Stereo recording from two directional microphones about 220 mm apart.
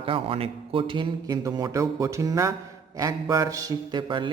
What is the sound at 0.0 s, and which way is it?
A man's voice, 25° right (ahead or behind).